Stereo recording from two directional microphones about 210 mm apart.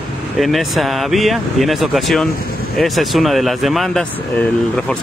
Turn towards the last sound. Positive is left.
turn(degrees=0)  # may be behind; listen again after turning